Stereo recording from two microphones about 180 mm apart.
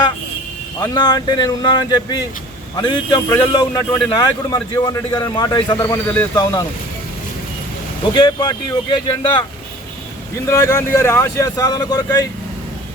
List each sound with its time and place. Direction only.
0.8 s speech: 20° left (ahead or behind)
8.1 s speech: 25° left (ahead or behind)
10.4 s speech: 15° left (ahead or behind)